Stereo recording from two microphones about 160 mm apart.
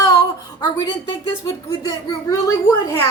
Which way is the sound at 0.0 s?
25° left (ahead or behind).